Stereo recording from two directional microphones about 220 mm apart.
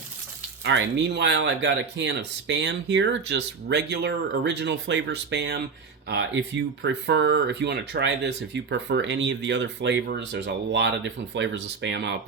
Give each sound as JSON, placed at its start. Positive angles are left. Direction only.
{"t": 0.6, "sound": "speech", "side_deg": -55}